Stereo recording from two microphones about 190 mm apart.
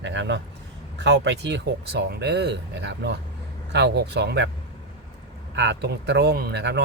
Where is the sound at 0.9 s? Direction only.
65° right (ahead or behind).